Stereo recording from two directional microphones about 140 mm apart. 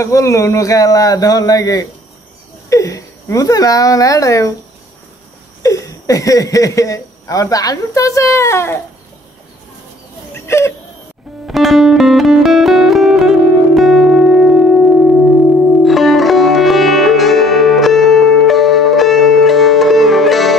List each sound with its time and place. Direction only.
0.0 s speech: 20° left (ahead or behind)
5.6 s speech: 25° left (ahead or behind)
10.3 s a sound: 20° left (ahead or behind)
11.4 s music: centre (ahead or behind)
15.8 s music: centre (ahead or behind)